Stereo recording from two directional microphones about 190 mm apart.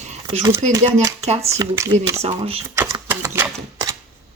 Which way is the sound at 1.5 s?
15° right (ahead or behind).